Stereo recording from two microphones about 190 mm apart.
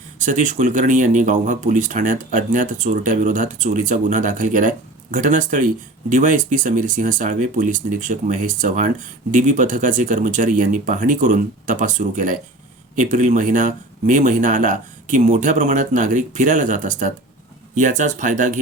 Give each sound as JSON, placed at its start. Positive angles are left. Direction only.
{"t": 0.2, "sound": "speech", "side_deg": -40}